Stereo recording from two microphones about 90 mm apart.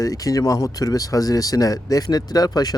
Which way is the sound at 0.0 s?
40° left (ahead or behind).